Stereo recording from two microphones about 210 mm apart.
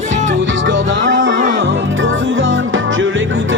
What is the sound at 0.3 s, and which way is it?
Music, 65° right (ahead or behind).